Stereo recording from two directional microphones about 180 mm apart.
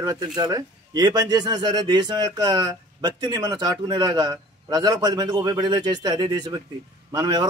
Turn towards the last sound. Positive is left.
turn(degrees=-25)  # may be behind; listen again after turning